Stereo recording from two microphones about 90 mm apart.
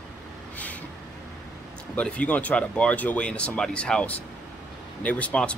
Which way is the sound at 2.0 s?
15° left (ahead or behind).